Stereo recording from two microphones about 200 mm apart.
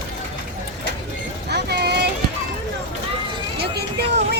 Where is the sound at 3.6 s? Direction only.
55° right (ahead or behind).